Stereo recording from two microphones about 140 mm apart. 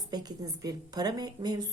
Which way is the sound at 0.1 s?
25° right (ahead or behind).